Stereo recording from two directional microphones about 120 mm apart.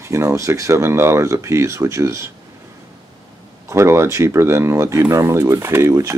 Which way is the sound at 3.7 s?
20° right (ahead or behind).